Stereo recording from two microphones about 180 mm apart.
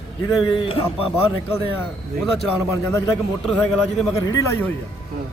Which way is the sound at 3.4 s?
Centre (ahead or behind).